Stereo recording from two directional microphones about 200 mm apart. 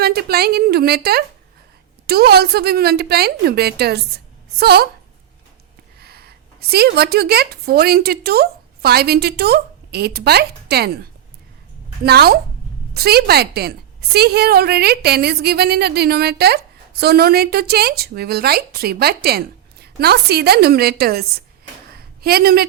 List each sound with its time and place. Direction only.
0.0 s a woman's voice: 50° right (ahead or behind)
6.0 s a woman's voice: 50° right (ahead or behind)